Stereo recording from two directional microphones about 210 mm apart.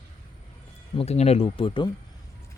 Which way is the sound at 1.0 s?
30° left (ahead or behind).